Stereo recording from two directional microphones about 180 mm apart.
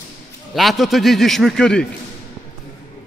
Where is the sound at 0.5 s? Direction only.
Centre (ahead or behind).